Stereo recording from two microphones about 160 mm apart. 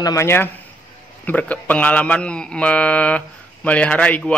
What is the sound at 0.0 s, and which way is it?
A man's voice, 20° left (ahead or behind).